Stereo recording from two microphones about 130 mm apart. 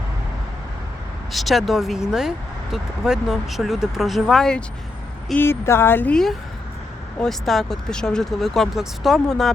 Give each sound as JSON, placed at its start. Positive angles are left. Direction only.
{"t": 1.3, "sound": "speech", "side_deg": 0}
{"t": 5.3, "sound": "speech", "side_deg": 15}
{"t": 7.2, "sound": "speech", "side_deg": 0}